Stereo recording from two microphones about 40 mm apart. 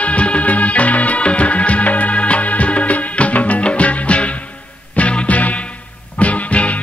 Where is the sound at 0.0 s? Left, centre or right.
Left.